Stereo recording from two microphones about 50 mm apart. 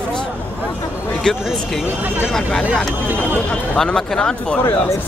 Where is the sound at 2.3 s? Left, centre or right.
Centre.